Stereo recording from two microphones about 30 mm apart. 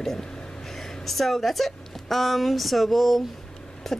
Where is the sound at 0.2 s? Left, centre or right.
Left.